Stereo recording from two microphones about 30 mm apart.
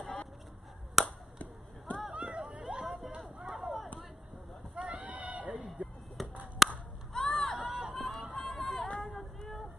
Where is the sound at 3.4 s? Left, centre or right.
Centre.